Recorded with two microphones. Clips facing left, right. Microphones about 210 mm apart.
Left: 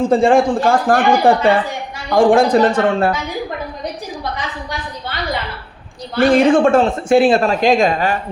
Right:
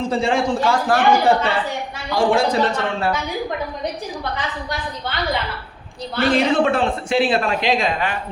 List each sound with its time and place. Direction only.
0.0 s speech: 50° left (ahead or behind)
6.1 s speech: 50° left (ahead or behind)